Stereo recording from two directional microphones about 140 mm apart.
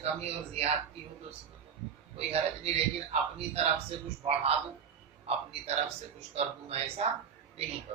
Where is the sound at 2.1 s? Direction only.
45° right (ahead or behind).